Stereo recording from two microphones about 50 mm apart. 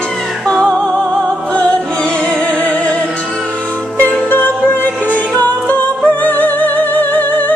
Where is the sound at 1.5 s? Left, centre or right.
Left.